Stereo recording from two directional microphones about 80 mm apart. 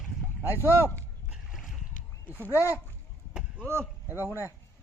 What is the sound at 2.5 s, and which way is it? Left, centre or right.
Speech, left.